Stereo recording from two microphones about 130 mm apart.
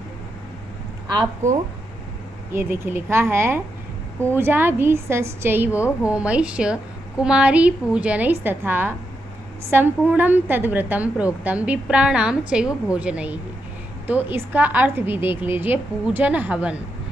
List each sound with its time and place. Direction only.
1.4 s speech: 65° right (ahead or behind)
2.5 s a woman's voice: 15° right (ahead or behind)